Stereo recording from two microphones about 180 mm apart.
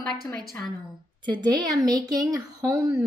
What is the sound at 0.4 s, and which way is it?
Speech, centre (ahead or behind).